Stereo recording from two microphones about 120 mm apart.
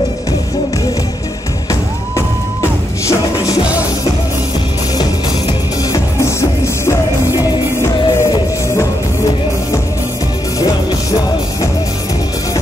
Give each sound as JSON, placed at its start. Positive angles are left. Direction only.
{"t": 1.7, "sound": "music", "side_deg": 25}
{"t": 6.2, "sound": "music", "side_deg": 25}